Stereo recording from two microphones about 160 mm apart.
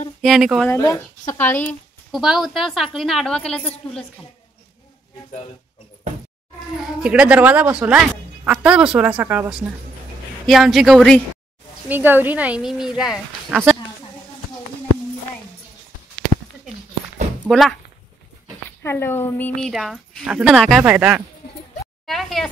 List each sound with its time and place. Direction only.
0.2 s a woman's voice: centre (ahead or behind)
0.7 s speech: 15° left (ahead or behind)
2.1 s a woman's voice: centre (ahead or behind)
6.8 s speech: 5° right (ahead or behind)
10.4 s a woman's voice: centre (ahead or behind)
11.9 s speech: 10° right (ahead or behind)
17.5 s a woman's voice: centre (ahead or behind)
18.8 s a woman's voice: 15° left (ahead or behind)